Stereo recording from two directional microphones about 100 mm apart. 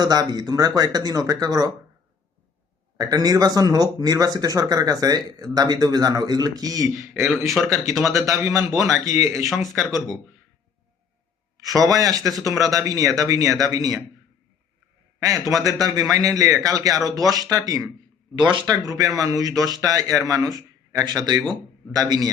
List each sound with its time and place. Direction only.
0.0 s speech: 40° right (ahead or behind)
3.0 s speech: 40° right (ahead or behind)
7.5 s speech: centre (ahead or behind)
7.9 s speech: 35° right (ahead or behind)
11.8 s speech: 35° right (ahead or behind)
15.2 s speech: 35° right (ahead or behind)
18.3 s speech: 50° right (ahead or behind)
18.7 s speech: 40° right (ahead or behind)